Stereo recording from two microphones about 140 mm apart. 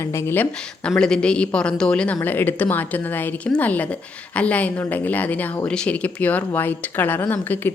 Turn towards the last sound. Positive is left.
turn(degrees=15)  # may be behind; listen again after turning